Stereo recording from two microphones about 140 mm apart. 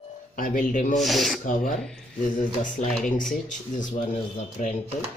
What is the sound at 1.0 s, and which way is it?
Speech, centre (ahead or behind).